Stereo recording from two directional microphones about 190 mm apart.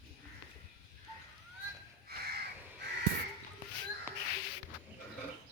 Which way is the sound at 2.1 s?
55° right (ahead or behind).